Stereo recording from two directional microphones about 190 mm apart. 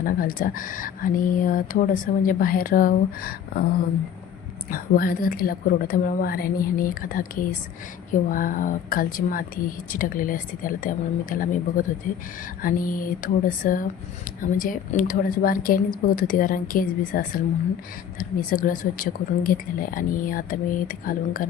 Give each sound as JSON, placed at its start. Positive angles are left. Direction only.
{"t": 0.0, "sound": "a woman's voice", "side_deg": 45}
{"t": 4.7, "sound": "a woman's voice", "side_deg": 50}